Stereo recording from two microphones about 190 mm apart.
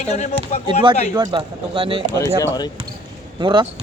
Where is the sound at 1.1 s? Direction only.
25° right (ahead or behind).